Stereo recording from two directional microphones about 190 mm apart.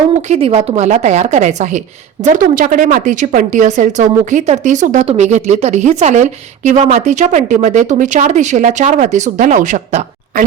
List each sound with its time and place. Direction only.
0.3 s speech: 30° right (ahead or behind)